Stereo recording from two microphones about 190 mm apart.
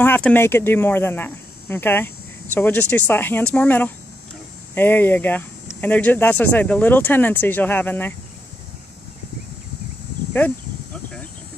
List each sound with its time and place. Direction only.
0.0 s speech: 10° left (ahead or behind)